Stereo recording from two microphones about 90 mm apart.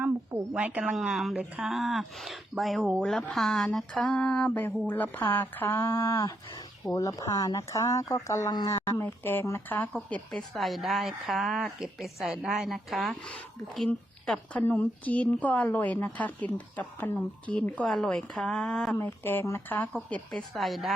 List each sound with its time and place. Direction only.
0.5 s a woman's voice: 15° right (ahead or behind); by 10.2 s 15° left (ahead or behind)
10.3 s speech: centre (ahead or behind)
13.7 s a woman's voice: 10° left (ahead or behind)
14.6 s a woman's voice: 20° left (ahead or behind)
18.9 s speech: 25° left (ahead or behind)
20.3 s speech: centre (ahead or behind)